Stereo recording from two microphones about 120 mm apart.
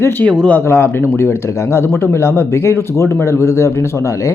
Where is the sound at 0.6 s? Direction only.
20° left (ahead or behind).